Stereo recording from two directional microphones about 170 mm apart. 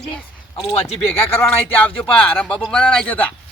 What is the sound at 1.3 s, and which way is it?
Speech, 15° left (ahead or behind).